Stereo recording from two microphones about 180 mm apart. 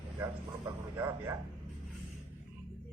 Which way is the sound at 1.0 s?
15° right (ahead or behind).